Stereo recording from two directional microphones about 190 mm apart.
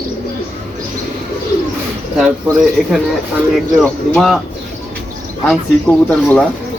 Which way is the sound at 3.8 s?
Centre (ahead or behind).